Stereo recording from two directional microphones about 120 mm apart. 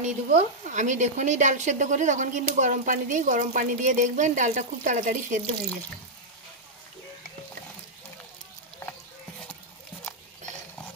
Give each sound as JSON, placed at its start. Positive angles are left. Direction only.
{"t": 0.0, "sound": "speech", "side_deg": -70}